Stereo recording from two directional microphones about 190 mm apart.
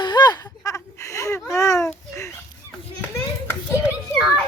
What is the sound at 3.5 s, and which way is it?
Children playing, 10° left (ahead or behind).